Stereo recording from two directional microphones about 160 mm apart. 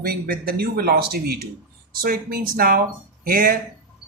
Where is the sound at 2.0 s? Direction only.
65° right (ahead or behind).